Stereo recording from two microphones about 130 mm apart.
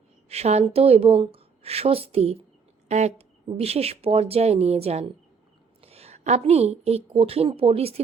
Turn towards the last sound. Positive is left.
turn(degrees=-50)  # may be behind; listen again after turning